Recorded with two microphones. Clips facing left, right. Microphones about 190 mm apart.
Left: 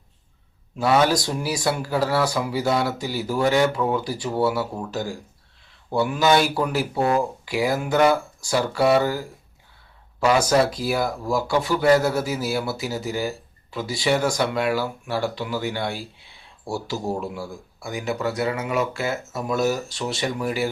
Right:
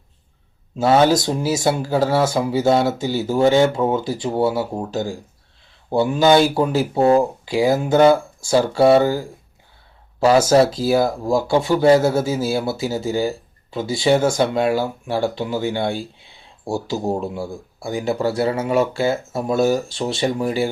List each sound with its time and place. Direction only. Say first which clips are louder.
0.8 s speech: right 4 dB; 30° right (ahead or behind)